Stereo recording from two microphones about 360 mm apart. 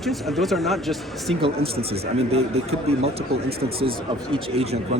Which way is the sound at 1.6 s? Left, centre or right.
Right.